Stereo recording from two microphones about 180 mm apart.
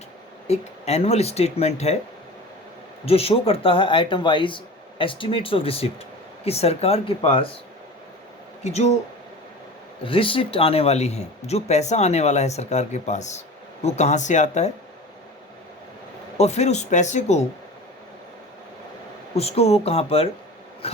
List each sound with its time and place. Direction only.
0.4 s speech: 35° left (ahead or behind)
3.1 s speech: 35° left (ahead or behind)
8.6 s speech: 40° left (ahead or behind)
10.0 s speech: 30° left (ahead or behind)
16.4 s speech: 40° left (ahead or behind)
19.3 s speech: 35° left (ahead or behind)